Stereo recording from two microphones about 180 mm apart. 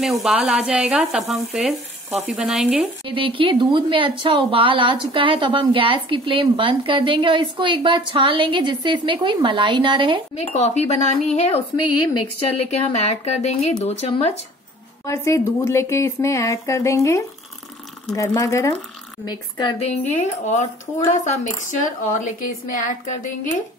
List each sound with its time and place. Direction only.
0.0 s frying: centre (ahead or behind)
3.1 s a woman's voice: 30° right (ahead or behind)
10.3 s speech: 35° left (ahead or behind)
11.7 s speech: 25° left (ahead or behind)
15.0 s speech: 15° left (ahead or behind)
19.9 s speech: 40° left (ahead or behind)